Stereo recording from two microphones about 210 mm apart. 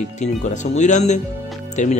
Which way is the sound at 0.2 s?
35° left (ahead or behind).